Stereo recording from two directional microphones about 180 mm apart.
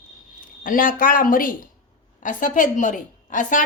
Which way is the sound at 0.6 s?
50° left (ahead or behind).